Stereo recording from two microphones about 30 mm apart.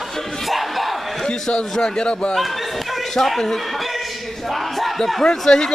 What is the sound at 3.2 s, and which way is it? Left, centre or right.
Speech, centre.